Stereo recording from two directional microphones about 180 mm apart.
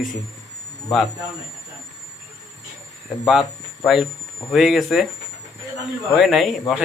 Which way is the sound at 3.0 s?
Centre (ahead or behind).